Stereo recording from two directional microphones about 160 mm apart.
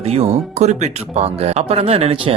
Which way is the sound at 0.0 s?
40° right (ahead or behind).